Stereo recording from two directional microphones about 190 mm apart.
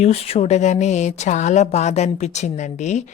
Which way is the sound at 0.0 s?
35° left (ahead or behind).